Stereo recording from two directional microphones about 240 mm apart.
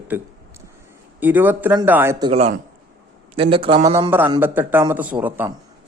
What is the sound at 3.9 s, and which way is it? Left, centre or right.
A man's voice, centre.